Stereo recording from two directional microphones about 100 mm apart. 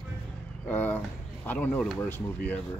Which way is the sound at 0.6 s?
15° left (ahead or behind).